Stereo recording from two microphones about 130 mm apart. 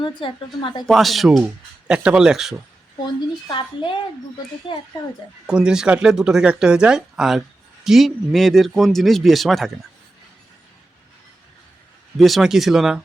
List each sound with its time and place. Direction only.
0.0 s a woman's voice: 40° left (ahead or behind)
0.9 s speech: centre (ahead or behind)
3.2 s a woman's voice: 35° left (ahead or behind)
5.5 s speech: 5° right (ahead or behind)
12.1 s speech: centre (ahead or behind)